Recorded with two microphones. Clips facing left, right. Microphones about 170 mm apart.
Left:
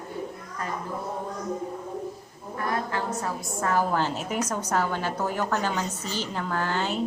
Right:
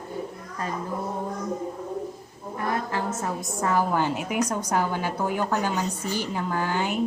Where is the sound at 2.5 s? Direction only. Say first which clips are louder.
Right 1 dB; 25° right (ahead or behind).